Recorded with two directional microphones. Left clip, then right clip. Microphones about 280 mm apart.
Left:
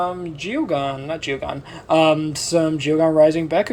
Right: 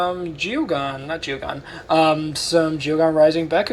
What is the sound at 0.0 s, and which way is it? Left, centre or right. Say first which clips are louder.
Speech: right 2 dB; left.